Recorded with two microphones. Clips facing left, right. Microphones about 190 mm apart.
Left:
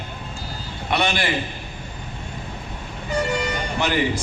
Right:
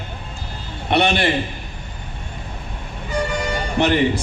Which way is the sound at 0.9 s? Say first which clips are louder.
Right 5 dB; 60° right (ahead or behind).